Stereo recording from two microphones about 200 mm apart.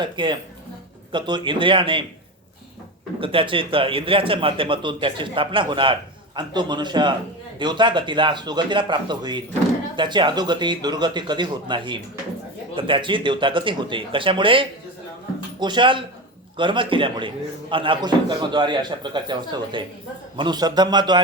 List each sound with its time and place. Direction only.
0.0 s a man's voice: 25° right (ahead or behind)
3.2 s a man's voice: 25° right (ahead or behind)